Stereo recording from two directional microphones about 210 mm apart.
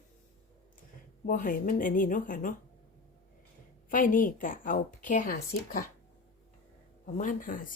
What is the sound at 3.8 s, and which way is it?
A woman's voice, 40° left (ahead or behind).